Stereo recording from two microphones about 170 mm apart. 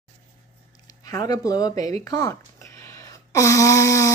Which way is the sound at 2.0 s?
20° left (ahead or behind).